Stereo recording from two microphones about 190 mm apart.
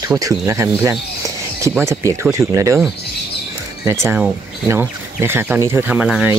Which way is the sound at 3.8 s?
15° right (ahead or behind).